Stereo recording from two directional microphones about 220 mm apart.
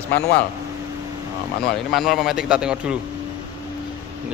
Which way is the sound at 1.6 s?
Centre (ahead or behind).